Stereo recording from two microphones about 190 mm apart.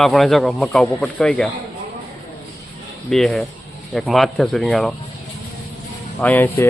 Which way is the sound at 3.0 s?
Centre (ahead or behind).